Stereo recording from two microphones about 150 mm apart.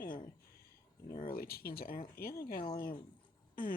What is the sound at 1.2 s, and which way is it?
Speech, 85° left.